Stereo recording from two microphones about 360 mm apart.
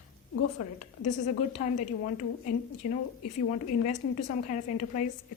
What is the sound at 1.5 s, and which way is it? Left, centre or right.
A woman's voice, centre.